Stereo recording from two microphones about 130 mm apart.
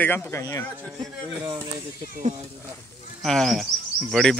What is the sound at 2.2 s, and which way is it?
Speech, 65° right (ahead or behind).